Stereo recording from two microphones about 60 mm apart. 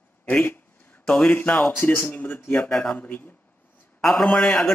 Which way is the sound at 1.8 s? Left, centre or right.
Left.